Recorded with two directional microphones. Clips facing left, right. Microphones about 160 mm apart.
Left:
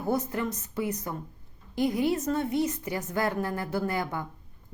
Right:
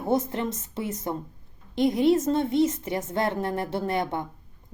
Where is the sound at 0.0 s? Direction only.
25° right (ahead or behind).